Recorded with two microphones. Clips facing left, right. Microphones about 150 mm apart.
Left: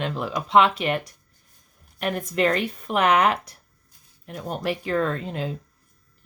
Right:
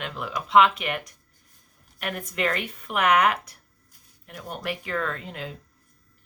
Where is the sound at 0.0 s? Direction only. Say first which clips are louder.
Left 5 dB; 30° left (ahead or behind).